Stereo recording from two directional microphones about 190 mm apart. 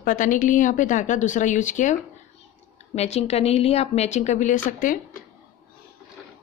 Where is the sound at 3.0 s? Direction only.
35° left (ahead or behind).